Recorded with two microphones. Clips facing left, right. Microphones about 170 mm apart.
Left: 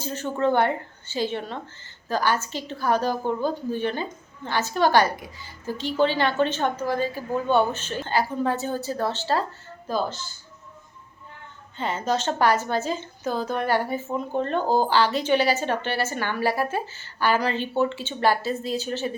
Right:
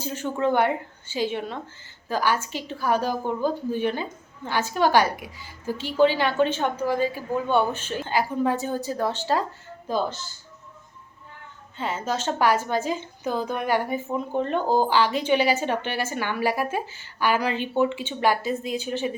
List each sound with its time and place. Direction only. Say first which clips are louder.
0.0 s a woman's voice: left 1 dB; 10° right (ahead or behind)
11.8 s a woman's voice: left 2 dB; 5° right (ahead or behind)